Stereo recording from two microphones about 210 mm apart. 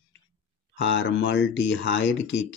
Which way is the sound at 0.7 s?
60° left (ahead or behind).